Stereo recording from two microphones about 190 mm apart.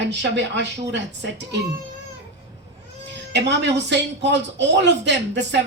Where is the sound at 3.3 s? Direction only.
65° right (ahead or behind).